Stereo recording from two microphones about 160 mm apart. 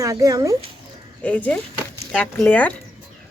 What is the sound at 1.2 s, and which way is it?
Speech, 10° left (ahead or behind).